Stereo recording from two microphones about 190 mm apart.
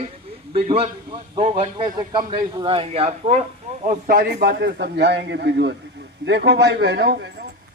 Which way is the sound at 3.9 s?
50° right (ahead or behind).